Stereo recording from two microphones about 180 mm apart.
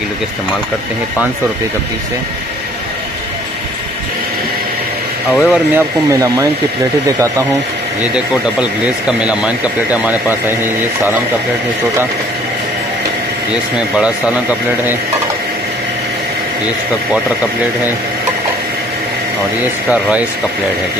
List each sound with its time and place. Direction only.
5.3 s speech: 5° right (ahead or behind)
6.0 s speech: 20° right (ahead or behind)
8.0 s speech: 5° right (ahead or behind)
13.7 s speech: 5° right (ahead or behind)
19.9 s speech: 10° right (ahead or behind)